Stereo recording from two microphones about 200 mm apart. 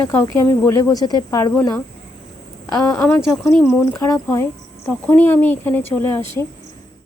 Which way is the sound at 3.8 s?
10° left (ahead or behind).